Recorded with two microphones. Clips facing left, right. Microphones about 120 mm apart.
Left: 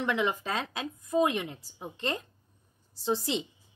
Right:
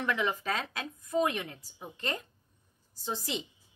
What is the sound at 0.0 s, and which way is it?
Speech, 25° left (ahead or behind).